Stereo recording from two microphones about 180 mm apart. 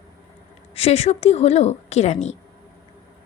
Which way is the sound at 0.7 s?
35° left (ahead or behind).